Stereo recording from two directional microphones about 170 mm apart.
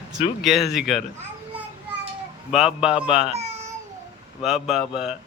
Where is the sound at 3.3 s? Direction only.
40° right (ahead or behind).